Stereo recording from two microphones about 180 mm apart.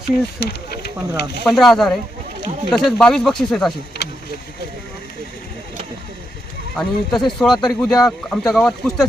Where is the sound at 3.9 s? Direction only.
65° left (ahead or behind).